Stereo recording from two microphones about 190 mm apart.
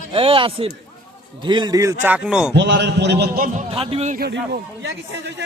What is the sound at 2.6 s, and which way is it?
A man's voice, 65° right (ahead or behind).